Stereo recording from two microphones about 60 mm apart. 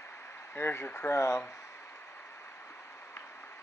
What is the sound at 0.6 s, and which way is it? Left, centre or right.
Speech, left.